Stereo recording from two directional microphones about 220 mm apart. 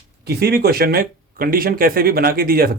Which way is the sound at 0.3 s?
45° right (ahead or behind).